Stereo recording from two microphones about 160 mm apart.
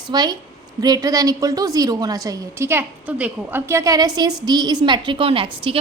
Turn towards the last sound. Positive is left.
turn(degrees=-35)  # may be behind; listen again after turning